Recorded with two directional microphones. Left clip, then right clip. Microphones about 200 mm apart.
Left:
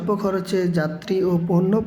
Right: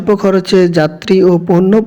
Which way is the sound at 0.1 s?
30° right (ahead or behind).